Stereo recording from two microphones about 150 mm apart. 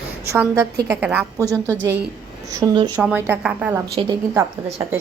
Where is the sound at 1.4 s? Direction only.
20° right (ahead or behind).